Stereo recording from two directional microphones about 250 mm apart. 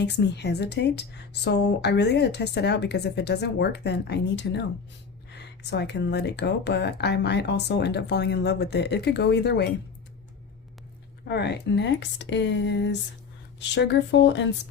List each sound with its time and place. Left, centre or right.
0.0 s a woman's voice: left
11.3 s a woman's voice: left